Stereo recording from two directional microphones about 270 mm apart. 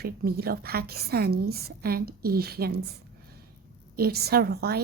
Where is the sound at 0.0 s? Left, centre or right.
Right.